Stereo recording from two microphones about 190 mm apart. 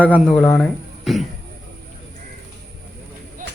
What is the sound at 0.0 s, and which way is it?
Speech, 5° left (ahead or behind).